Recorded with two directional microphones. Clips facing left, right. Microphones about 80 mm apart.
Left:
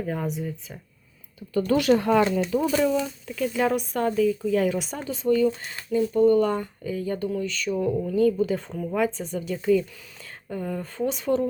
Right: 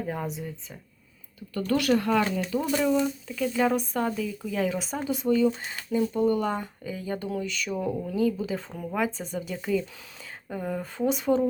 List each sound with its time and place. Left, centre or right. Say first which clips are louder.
0.1 s speech: left 3 dB; centre
1.5 s speech: left 4 dB; centre
2.6 s speech: even; centre
5.0 s speech: left 2 dB; centre